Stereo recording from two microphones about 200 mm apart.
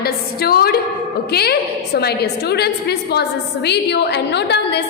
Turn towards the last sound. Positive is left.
turn(degrees=55)  # may be behind; listen again after turning